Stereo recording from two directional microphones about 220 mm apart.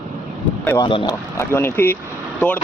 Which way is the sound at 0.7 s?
20° left (ahead or behind).